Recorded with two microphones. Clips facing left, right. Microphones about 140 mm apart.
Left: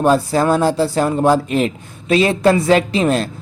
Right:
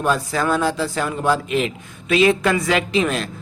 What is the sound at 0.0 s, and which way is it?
A woman's voice, 35° left (ahead or behind).